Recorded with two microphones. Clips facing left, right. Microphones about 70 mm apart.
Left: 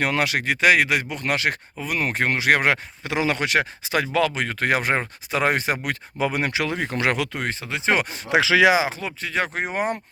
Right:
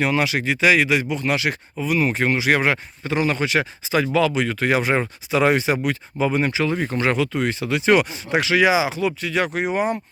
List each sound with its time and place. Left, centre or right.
0.0 s speech: left
7.6 s speech: left
8.3 s speech: left
8.7 s speech: left
9.7 s speech: left